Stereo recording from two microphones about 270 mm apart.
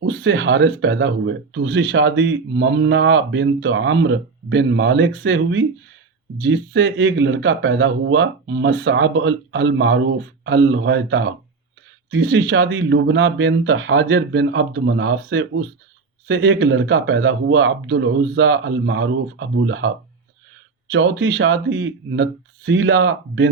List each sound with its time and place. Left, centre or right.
0.0 s speech: right
20.9 s speech: right